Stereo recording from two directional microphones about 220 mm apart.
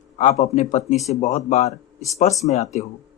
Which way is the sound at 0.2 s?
30° left (ahead or behind).